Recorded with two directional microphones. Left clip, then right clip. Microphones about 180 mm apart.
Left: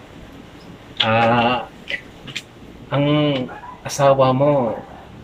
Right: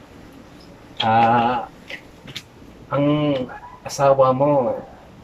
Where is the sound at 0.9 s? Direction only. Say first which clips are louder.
Even; 15° right (ahead or behind).